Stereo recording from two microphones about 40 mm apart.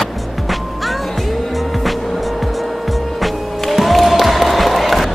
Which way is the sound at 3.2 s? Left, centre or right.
Centre.